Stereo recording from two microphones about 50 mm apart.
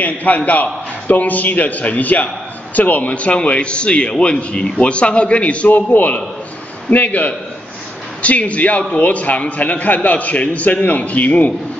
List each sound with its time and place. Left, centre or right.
0.0 s a man's voice: left